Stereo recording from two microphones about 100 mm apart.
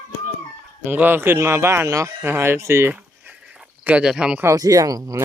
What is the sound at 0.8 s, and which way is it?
Speech, 20° right (ahead or behind).